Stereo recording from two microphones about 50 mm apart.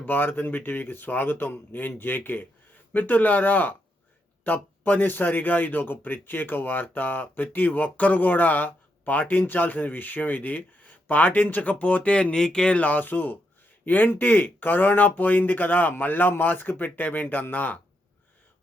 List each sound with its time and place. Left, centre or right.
0.0 s speech: left